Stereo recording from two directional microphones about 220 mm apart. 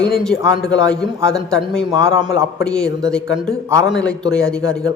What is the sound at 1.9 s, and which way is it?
Speech, 15° right (ahead or behind).